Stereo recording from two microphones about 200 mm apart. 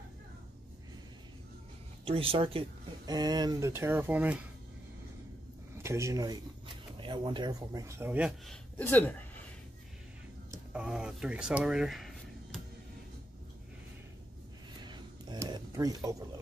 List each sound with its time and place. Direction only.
2.0 s speech: 25° right (ahead or behind); by 4.5 s 5° right (ahead or behind)
5.8 s speech: 15° right (ahead or behind)
8.5 s speech: 10° left (ahead or behind)
10.5 s speech: 5° right (ahead or behind)
14.8 s a sound: 20° right (ahead or behind)